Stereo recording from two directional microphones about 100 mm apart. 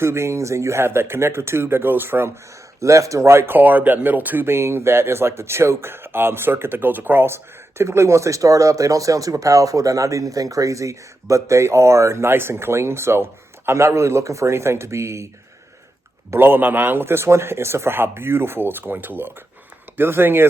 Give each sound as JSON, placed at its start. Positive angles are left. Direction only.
{"t": 0.0, "sound": "speech", "side_deg": -25}
{"t": 16.3, "sound": "speech", "side_deg": -20}